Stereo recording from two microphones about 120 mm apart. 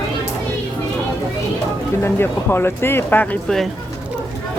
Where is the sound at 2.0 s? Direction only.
20° left (ahead or behind).